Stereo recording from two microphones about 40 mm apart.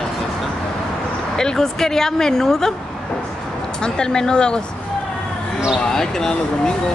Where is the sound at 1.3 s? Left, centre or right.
Centre.